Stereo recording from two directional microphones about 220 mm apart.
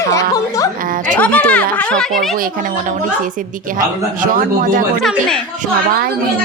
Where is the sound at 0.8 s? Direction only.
40° right (ahead or behind).